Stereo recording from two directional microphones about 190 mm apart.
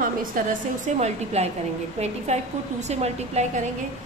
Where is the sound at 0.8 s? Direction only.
35° right (ahead or behind).